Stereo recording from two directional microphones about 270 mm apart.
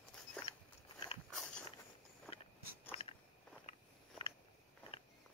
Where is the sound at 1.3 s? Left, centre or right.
Centre.